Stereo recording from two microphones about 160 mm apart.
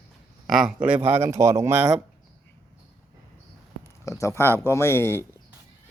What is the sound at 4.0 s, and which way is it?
Speech, 20° left (ahead or behind).